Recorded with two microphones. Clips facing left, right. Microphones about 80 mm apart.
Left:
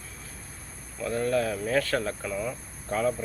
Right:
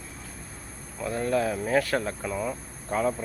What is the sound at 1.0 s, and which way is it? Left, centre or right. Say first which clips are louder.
Speech: even; centre.